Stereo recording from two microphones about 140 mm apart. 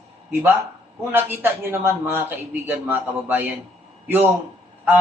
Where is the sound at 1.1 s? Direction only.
15° right (ahead or behind).